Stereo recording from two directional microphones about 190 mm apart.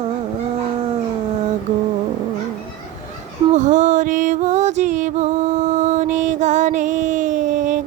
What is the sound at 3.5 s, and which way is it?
Music, 40° right (ahead or behind).